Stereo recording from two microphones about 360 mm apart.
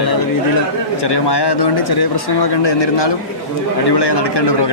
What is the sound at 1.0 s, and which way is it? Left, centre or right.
Speech, left.